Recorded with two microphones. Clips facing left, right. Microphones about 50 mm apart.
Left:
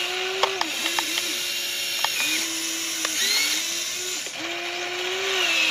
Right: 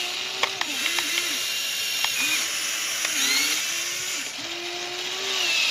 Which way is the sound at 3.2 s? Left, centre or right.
Centre.